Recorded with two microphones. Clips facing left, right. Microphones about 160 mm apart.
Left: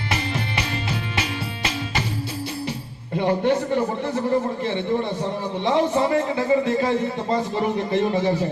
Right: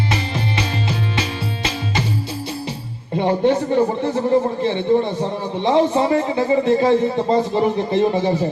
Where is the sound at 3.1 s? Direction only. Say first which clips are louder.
Right 3 dB; 25° right (ahead or behind).